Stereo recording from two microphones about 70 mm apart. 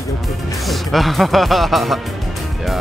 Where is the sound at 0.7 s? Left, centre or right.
Centre.